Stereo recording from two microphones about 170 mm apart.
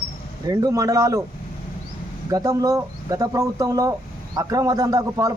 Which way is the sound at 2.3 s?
20° right (ahead or behind).